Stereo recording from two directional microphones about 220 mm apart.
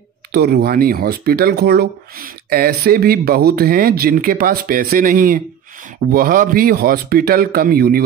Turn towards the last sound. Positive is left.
turn(degrees=-45)  # may be behind; listen again after turning